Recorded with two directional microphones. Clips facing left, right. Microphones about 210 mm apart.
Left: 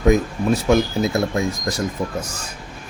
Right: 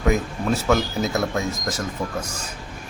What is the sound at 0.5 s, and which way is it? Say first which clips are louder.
Speech: left 4 dB; 15° left (ahead or behind).